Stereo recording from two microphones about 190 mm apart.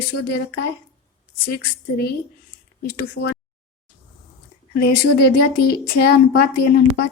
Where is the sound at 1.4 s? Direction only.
55° left (ahead or behind).